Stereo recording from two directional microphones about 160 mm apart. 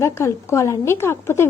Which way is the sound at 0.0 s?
15° left (ahead or behind).